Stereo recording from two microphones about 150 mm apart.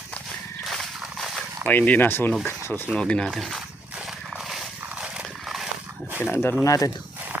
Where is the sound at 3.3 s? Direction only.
Centre (ahead or behind).